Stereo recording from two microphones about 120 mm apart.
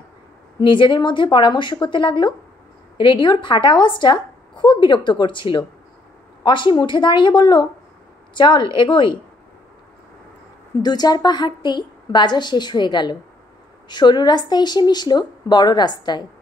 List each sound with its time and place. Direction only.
0.6 s a woman's voice: 45° left (ahead or behind)
10.8 s a woman's voice: 35° left (ahead or behind)